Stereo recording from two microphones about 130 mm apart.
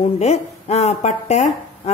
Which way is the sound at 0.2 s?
55° left (ahead or behind).